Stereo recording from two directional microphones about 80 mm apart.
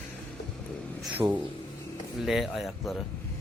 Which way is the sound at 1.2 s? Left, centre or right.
Right.